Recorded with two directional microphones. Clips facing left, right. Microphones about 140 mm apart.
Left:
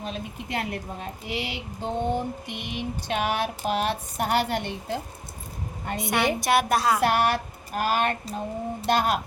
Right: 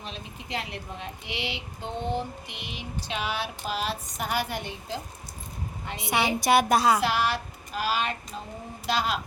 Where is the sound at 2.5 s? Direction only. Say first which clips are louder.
Left 7 dB; 55° left (ahead or behind).